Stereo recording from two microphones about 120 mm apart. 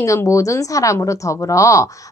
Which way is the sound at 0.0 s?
25° left (ahead or behind).